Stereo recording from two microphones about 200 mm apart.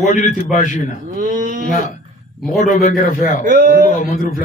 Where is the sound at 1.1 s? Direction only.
40° right (ahead or behind).